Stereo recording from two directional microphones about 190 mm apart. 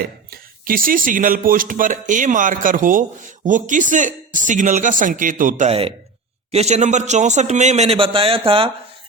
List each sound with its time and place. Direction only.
0.3 s a man's voice: 50° right (ahead or behind); by 8.7 s 30° right (ahead or behind)